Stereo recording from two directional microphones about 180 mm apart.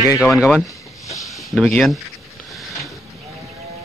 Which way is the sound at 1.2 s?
Centre (ahead or behind).